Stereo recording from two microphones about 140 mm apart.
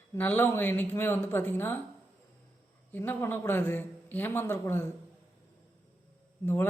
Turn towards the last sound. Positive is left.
turn(degrees=15)  # may be behind; listen again after turning